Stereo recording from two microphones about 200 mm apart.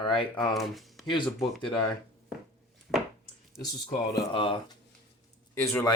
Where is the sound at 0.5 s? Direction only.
Centre (ahead or behind).